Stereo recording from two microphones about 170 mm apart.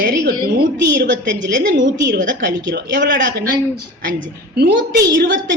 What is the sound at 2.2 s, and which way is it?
Speech, 50° right (ahead or behind).